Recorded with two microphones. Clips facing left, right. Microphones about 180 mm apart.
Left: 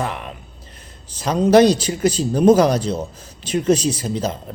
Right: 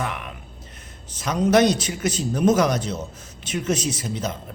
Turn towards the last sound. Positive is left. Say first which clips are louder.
# left 5 dB
turn(degrees=30)  # may be behind; listen again after turning